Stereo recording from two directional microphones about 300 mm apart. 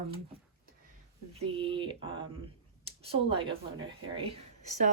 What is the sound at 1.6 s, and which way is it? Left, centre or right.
Speech, centre.